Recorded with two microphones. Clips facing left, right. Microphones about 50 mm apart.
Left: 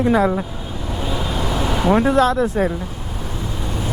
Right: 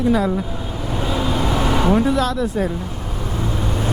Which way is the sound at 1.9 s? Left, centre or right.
Left.